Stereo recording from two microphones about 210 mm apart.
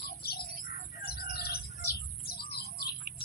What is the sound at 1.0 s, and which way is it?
Bird, 45° left (ahead or behind).